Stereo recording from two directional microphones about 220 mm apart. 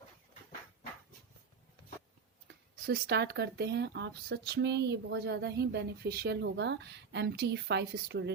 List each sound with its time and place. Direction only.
2.8 s speech: 45° right (ahead or behind)